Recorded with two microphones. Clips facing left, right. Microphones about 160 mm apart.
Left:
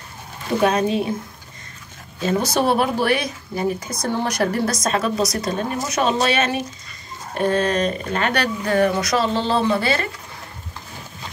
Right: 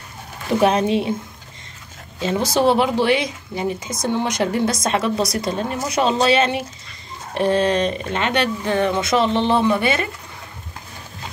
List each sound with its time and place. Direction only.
0.6 s speech: 25° right (ahead or behind)
2.1 s speech: 25° right (ahead or behind)